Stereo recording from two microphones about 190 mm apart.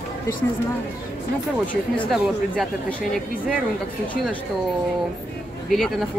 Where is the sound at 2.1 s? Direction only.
Centre (ahead or behind).